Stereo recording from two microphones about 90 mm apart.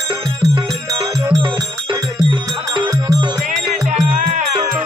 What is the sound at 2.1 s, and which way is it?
Music, 65° right (ahead or behind).